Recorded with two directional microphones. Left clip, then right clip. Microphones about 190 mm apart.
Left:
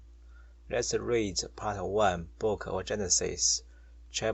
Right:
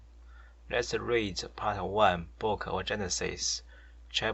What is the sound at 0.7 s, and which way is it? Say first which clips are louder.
Speech: even; 40° left (ahead or behind).